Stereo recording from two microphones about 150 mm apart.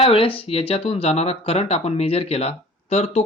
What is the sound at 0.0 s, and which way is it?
Speech, 40° left (ahead or behind).